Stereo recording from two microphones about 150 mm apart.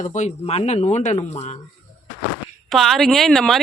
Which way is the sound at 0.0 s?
50° left (ahead or behind).